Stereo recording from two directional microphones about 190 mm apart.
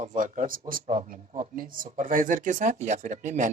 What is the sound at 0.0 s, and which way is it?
Speech, 40° right (ahead or behind).